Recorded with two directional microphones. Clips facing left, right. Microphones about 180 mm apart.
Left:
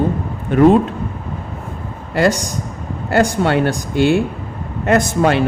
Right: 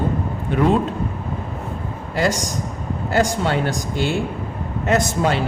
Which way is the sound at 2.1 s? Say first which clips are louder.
Left 5 dB; 60° left (ahead or behind).